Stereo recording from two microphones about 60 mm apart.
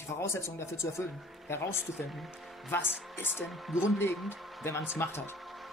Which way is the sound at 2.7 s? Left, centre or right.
Left.